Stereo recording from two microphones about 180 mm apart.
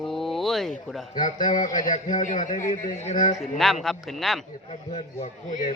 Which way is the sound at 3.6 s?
Centre (ahead or behind).